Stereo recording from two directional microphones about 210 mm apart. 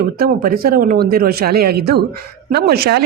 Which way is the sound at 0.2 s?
45° right (ahead or behind).